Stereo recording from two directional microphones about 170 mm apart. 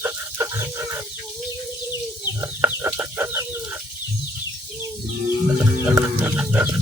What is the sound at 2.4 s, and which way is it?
Chicken, 15° right (ahead or behind).